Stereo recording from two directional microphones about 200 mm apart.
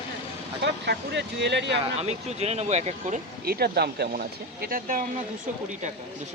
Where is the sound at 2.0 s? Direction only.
30° right (ahead or behind).